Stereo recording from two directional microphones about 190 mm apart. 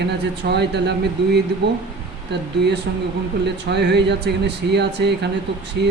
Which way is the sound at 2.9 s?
60° right (ahead or behind).